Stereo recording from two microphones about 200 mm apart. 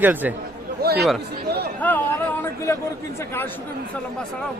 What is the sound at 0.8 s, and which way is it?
Chatter, 50° right (ahead or behind).